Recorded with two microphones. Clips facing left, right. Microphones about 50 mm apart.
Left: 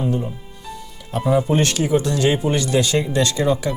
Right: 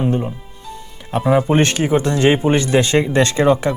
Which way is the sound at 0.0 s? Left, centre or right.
Right.